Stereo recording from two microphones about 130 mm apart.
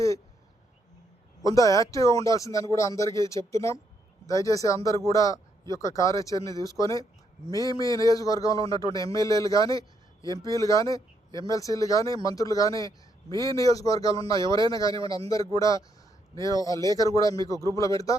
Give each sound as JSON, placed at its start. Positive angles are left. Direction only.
{"t": 1.5, "sound": "speech", "side_deg": 25}